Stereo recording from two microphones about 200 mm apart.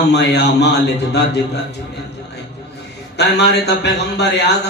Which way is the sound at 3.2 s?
60° left (ahead or behind).